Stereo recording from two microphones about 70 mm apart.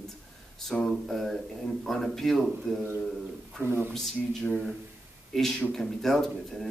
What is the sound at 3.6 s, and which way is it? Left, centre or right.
Speech, right.